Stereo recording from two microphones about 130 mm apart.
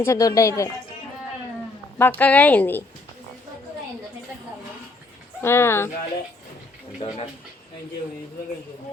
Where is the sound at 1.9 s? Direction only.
15° left (ahead or behind).